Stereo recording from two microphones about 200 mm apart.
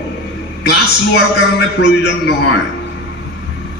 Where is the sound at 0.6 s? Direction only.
55° left (ahead or behind).